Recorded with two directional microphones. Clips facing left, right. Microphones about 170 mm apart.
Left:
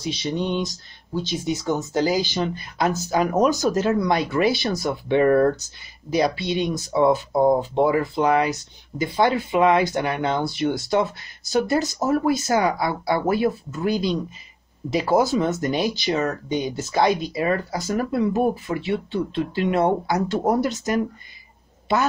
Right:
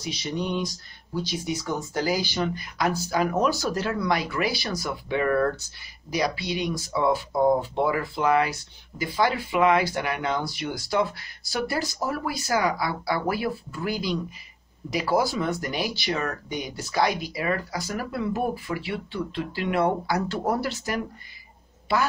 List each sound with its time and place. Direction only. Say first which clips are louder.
0.0 s a woman's voice: left 4 dB; 25° left (ahead or behind)